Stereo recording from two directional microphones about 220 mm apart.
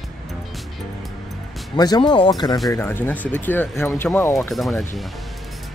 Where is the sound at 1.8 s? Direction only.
20° left (ahead or behind).